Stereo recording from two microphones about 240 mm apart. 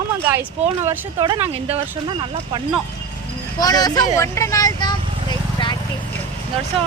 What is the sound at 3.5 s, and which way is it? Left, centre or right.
Speech, centre.